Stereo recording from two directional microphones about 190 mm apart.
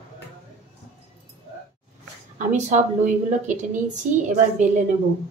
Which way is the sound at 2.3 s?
40° right (ahead or behind).